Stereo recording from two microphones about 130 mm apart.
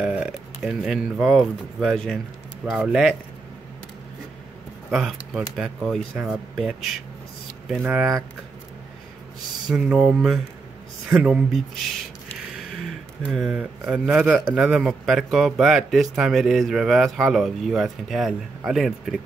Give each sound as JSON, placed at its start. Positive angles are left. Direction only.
{"t": 0.0, "sound": "speech", "side_deg": -5}
{"t": 4.9, "sound": "speech", "side_deg": 0}
{"t": 9.7, "sound": "speech", "side_deg": -5}